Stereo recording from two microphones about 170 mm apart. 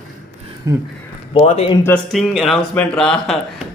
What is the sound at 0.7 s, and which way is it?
Speech, 20° right (ahead or behind).